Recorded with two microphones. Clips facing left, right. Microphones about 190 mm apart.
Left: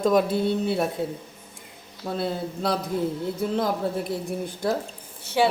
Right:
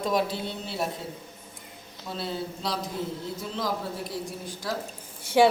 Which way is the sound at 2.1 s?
55° left (ahead or behind).